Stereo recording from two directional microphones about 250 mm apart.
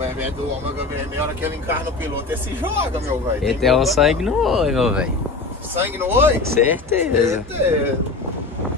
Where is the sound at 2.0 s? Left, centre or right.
Centre.